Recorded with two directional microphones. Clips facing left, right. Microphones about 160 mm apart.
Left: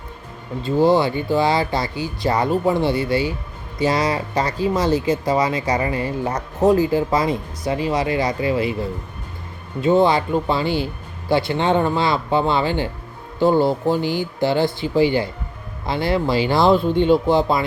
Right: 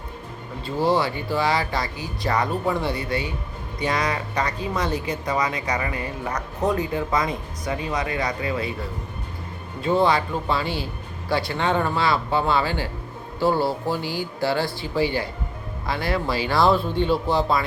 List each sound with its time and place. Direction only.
0.6 s speech: 25° left (ahead or behind)
10.1 s speech: 25° left (ahead or behind)